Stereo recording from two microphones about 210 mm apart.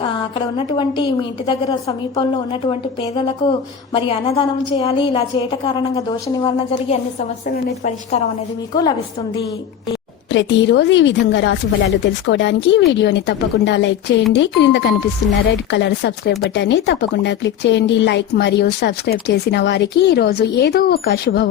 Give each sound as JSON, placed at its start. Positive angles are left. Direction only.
{"t": 0.5, "sound": "a woman's voice", "side_deg": 20}
{"t": 8.7, "sound": "a woman's voice", "side_deg": 20}
{"t": 10.3, "sound": "a woman's voice", "side_deg": 55}